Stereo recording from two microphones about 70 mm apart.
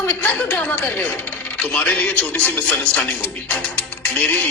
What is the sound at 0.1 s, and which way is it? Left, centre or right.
Speech, left.